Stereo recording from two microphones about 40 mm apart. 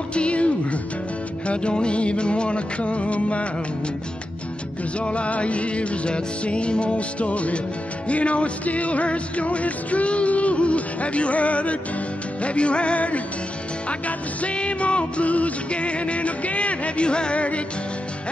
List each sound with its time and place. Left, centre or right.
0.1 s music: left
5.0 s music: left